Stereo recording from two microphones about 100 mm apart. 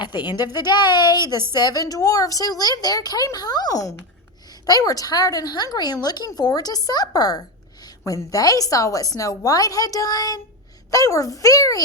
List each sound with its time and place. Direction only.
0.0 s a woman's voice: 50° left (ahead or behind)